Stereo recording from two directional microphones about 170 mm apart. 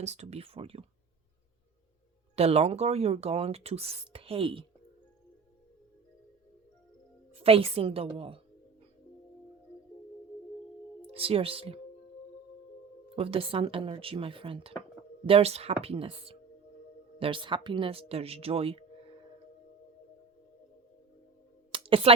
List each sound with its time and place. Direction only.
0.0 s speech: 40° right (ahead or behind)
2.3 s speech: 35° right (ahead or behind)
7.3 s speech: 35° right (ahead or behind)
11.1 s speech: 35° right (ahead or behind)
13.1 s speech: 35° right (ahead or behind)
21.7 s a sound: 35° right (ahead or behind)